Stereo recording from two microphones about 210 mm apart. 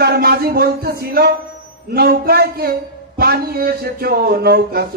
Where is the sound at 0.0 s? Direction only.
50° right (ahead or behind).